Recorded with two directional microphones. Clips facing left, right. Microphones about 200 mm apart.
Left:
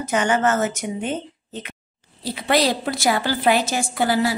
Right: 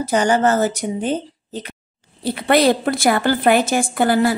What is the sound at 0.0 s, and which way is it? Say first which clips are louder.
A woman's voice: right 4 dB; 35° right (ahead or behind).